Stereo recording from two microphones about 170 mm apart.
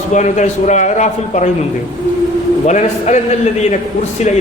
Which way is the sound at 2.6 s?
45° left (ahead or behind).